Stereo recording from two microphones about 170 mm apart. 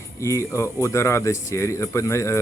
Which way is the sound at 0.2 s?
15° left (ahead or behind).